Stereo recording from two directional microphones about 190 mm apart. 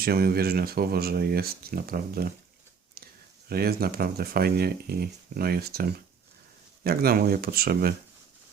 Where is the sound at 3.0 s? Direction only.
55° right (ahead or behind).